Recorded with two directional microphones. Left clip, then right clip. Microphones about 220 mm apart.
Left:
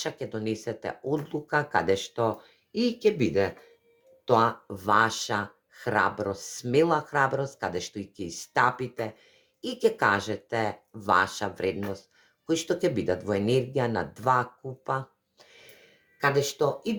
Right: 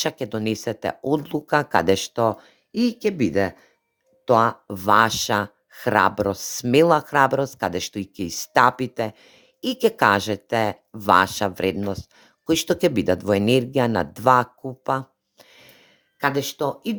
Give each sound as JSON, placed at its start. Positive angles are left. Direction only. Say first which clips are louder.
{"t": 0.0, "sound": "speech", "louder": "right 7 dB", "side_deg": -45}